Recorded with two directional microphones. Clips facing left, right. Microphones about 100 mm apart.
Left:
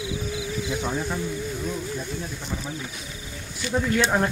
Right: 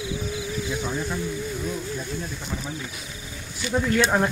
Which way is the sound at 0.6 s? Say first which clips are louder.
Left 2 dB; 75° left (ahead or behind).